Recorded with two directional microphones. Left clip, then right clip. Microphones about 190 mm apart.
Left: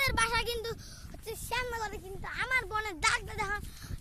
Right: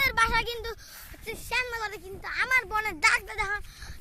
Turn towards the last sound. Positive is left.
turn(degrees=-35)  # may be behind; listen again after turning